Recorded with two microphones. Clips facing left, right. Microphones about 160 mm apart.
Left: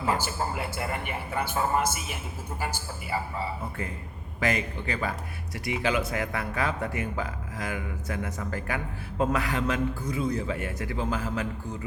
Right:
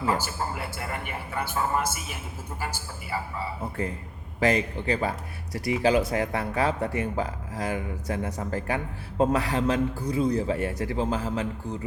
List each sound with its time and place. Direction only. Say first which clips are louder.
0.2 s a man's voice: left 1 dB; 20° left (ahead or behind)
4.4 s speech: right 4 dB; 30° right (ahead or behind)